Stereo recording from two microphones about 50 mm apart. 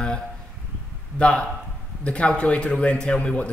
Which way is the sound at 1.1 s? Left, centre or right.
Left.